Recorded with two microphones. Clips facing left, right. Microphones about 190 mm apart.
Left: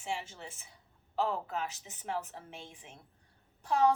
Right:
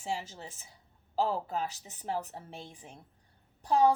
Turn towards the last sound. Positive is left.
turn(degrees=-35)  # may be behind; listen again after turning